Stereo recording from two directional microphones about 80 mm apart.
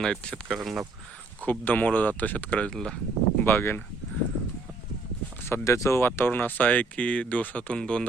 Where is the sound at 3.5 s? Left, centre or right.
Left.